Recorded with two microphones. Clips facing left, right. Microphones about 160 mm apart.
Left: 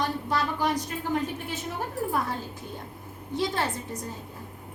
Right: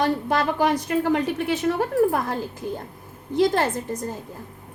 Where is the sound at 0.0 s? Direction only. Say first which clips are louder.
Right 6 dB; 65° right (ahead or behind); by 1.7 s 80° right.